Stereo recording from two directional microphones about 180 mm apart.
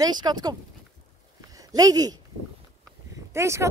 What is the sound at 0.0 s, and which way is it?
Speech, 25° right (ahead or behind).